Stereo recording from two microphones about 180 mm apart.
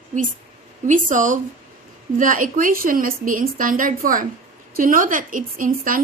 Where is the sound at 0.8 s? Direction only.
45° right (ahead or behind).